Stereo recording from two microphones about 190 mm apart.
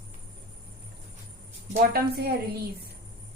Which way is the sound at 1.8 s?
55° right (ahead or behind).